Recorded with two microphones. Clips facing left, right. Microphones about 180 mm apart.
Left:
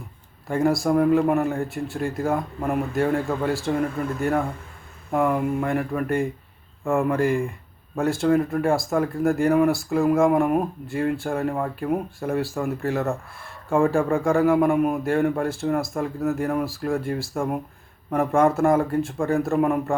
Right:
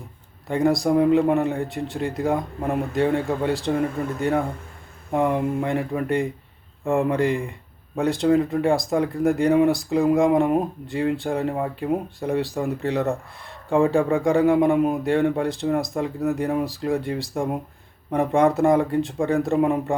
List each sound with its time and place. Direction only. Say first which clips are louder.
0.4 s speech: right 1 dB; 20° right (ahead or behind)
5.1 s speech: even; 20° right (ahead or behind)